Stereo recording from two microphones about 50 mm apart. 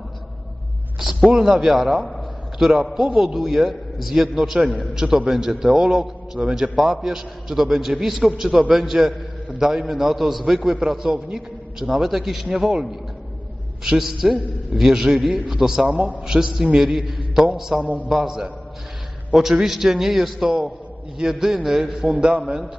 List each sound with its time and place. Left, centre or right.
0.9 s a man's voice: centre
13.8 s a man's voice: centre
16.0 s a man's voice: right